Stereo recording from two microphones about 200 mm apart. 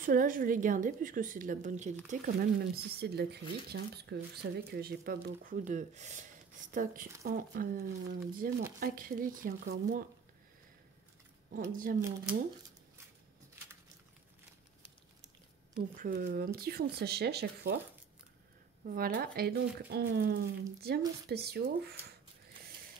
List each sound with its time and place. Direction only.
0.0 s speech: 45° right (ahead or behind)
2.0 s speech: 45° right (ahead or behind)
11.7 s speech: 45° right (ahead or behind)
15.2 s squish: 40° right (ahead or behind)
16.5 s speech: 50° right (ahead or behind)
18.9 s speech: 45° right (ahead or behind)